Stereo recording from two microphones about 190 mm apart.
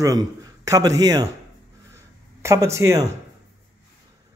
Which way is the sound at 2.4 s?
15° right (ahead or behind).